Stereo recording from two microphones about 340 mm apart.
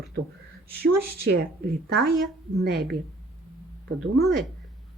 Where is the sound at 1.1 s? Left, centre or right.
Right.